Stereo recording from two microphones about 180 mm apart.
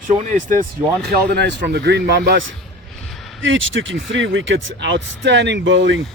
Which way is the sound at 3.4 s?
90° right.